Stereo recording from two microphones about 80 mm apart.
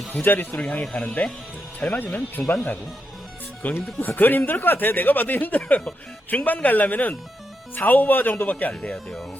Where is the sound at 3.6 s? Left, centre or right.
Left.